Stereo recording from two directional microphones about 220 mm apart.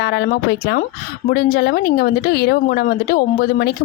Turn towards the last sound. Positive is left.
turn(degrees=45)  # may be behind; listen again after turning